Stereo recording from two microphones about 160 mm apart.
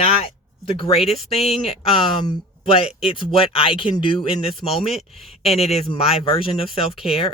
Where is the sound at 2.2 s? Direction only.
30° left (ahead or behind).